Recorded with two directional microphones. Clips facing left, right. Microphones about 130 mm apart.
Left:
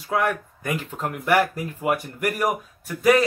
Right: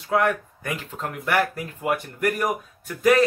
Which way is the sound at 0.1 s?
5° left (ahead or behind).